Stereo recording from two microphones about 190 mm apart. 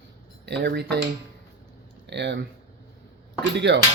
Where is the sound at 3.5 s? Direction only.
65° right (ahead or behind).